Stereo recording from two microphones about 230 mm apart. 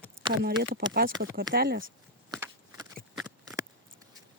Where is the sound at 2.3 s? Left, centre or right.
Centre.